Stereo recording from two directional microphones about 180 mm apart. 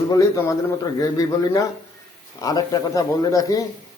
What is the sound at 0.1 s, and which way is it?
A man's voice, 20° left (ahead or behind).